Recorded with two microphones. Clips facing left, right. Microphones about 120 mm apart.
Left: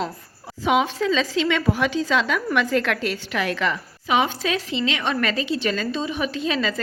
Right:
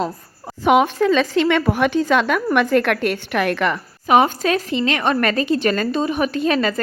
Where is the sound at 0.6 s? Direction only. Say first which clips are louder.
Right 5 dB; 55° right (ahead or behind).